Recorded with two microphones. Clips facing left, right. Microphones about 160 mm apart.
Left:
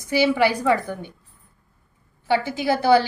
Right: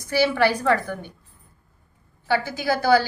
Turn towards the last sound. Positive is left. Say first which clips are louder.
# left 2 dB
turn(degrees=25)  # may be behind; listen again after turning